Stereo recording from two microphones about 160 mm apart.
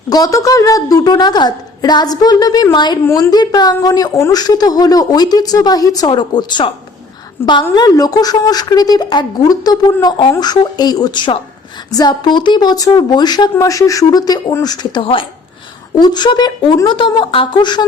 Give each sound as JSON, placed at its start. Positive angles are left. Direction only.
{"t": 0.1, "sound": "a woman's voice", "side_deg": 20}
{"t": 7.4, "sound": "a woman's voice", "side_deg": 15}
{"t": 7.8, "sound": "a woman's voice", "side_deg": 25}